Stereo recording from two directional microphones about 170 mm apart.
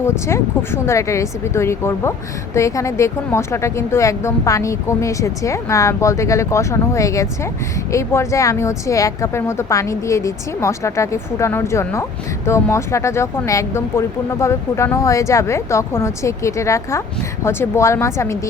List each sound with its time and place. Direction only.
0.0 s a woman's voice: 15° left (ahead or behind)